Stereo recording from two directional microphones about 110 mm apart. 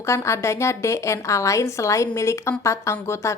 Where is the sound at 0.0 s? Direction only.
25° left (ahead or behind).